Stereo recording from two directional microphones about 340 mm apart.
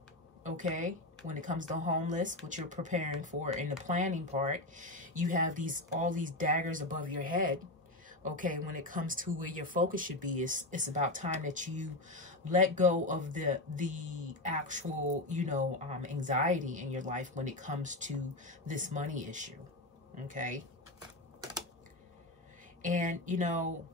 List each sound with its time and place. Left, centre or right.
0.4 s speech: right
22.8 s speech: right